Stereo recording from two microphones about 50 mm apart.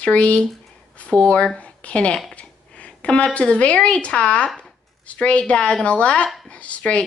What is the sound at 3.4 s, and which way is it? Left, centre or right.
Speech, left.